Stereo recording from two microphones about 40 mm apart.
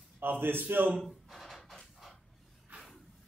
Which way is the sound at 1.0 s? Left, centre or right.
Centre.